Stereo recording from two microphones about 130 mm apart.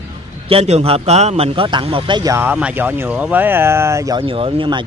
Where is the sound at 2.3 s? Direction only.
10° right (ahead or behind).